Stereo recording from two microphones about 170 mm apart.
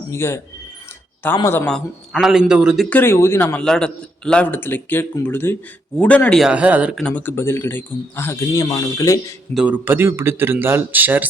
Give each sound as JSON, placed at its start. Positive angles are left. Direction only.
{"t": 0.1, "sound": "a man's voice", "side_deg": 15}
{"t": 1.4, "sound": "a man's voice", "side_deg": 15}
{"t": 2.9, "sound": "a man's voice", "side_deg": 15}
{"t": 7.0, "sound": "a man's voice", "side_deg": 10}
{"t": 9.6, "sound": "speech", "side_deg": -10}